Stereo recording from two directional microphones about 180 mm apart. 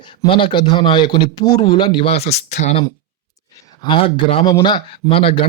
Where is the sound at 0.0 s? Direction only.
25° left (ahead or behind).